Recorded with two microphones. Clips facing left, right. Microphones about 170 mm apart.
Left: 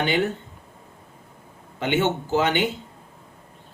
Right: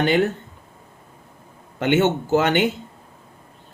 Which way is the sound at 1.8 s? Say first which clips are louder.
Right 4 dB; 50° right (ahead or behind).